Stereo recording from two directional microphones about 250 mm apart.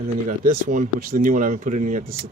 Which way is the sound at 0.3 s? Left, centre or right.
Right.